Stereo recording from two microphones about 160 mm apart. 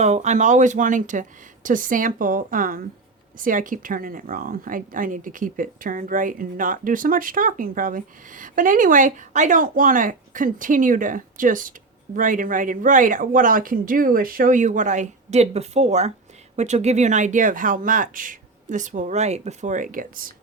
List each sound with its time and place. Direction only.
0.0 s speech: 45° right (ahead or behind)